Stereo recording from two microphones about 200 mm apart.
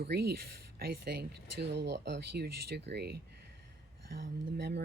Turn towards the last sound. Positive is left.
turn(degrees=-55)  # may be behind; listen again after turning